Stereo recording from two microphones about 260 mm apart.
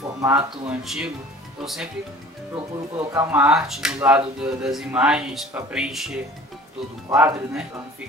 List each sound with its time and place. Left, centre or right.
0.2 s speech: centre
3.1 s speech: centre